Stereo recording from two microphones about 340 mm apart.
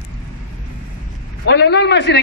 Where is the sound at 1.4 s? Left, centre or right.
Left.